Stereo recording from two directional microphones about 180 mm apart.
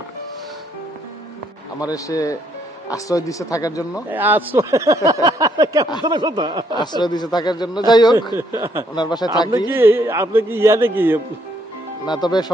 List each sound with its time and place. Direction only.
1.8 s a man's voice: 20° left (ahead or behind)
4.1 s speech: 10° right (ahead or behind)
6.7 s a man's voice: 25° left (ahead or behind)
8.4 s speech: 15° right (ahead or behind)
9.0 s a man's voice: 25° left (ahead or behind)
9.6 s speech: 10° right (ahead or behind)
12.0 s a man's voice: 25° left (ahead or behind)